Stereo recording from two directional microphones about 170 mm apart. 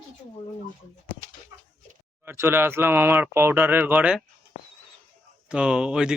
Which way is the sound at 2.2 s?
15° right (ahead or behind).